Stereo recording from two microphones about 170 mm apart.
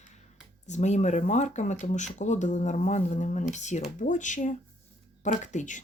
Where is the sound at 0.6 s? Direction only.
45° left (ahead or behind).